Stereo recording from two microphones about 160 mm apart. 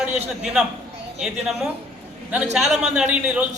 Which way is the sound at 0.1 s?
45° right (ahead or behind).